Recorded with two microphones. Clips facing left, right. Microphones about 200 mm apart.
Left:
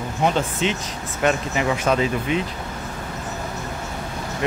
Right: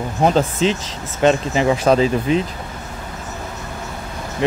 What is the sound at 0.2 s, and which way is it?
Speech, 35° right (ahead or behind).